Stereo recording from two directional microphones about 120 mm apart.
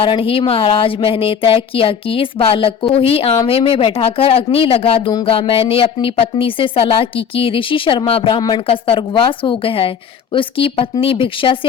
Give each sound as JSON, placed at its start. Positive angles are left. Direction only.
{"t": 0.0, "sound": "a woman's voice", "side_deg": 50}
{"t": 8.4, "sound": "speech", "side_deg": 35}
{"t": 8.6, "sound": "a woman's voice", "side_deg": 50}